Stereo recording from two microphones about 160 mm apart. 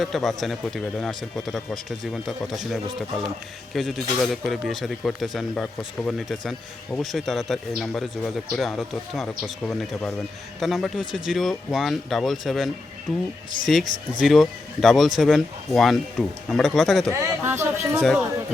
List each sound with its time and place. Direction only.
0.0 s speech: centre (ahead or behind)
3.8 s speech: centre (ahead or behind)
17.2 s speech: 15° right (ahead or behind)
18.0 s speech: centre (ahead or behind)